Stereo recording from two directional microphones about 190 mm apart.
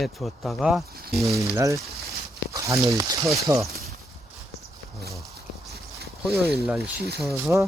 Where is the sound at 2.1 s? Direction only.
15° right (ahead or behind).